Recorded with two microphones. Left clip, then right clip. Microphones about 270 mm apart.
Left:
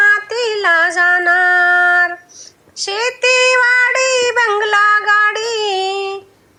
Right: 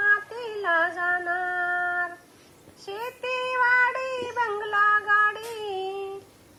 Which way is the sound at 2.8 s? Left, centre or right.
Left.